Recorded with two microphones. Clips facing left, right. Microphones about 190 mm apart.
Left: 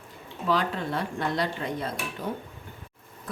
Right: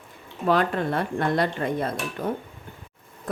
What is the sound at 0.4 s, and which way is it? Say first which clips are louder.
Speech: right 5 dB; 55° right (ahead or behind).